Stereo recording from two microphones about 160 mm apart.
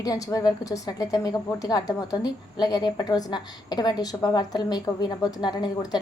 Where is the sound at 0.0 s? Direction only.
20° left (ahead or behind).